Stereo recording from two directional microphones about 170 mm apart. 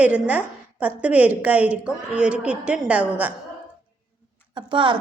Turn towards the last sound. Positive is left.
turn(degrees=-30)  # may be behind; listen again after turning